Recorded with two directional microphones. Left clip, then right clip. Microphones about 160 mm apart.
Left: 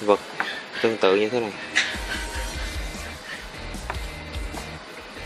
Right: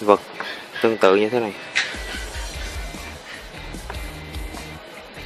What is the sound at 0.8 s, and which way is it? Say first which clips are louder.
Speech: right 4 dB; 15° right (ahead or behind).